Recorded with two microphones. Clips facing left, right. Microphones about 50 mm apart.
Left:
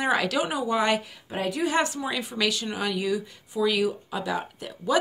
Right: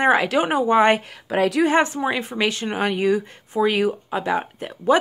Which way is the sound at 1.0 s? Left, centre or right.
Right.